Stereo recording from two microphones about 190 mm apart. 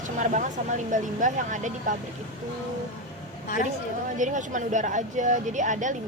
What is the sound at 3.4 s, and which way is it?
Speech, 45° left (ahead or behind).